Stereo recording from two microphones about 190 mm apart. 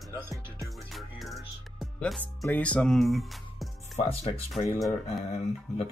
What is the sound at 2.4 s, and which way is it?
Speech, 5° left (ahead or behind).